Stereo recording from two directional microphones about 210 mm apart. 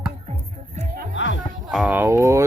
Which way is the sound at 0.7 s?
40° right (ahead or behind).